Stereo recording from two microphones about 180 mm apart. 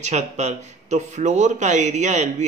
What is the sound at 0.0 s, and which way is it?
A man's voice, 40° right (ahead or behind).